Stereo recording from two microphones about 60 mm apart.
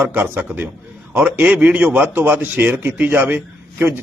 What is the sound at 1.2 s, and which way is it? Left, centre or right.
A man's voice, right.